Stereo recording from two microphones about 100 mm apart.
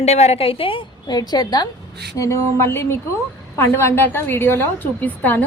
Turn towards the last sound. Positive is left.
turn(degrees=15)  # may be behind; listen again after turning